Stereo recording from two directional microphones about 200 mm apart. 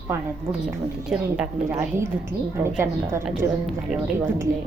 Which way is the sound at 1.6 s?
15° right (ahead or behind).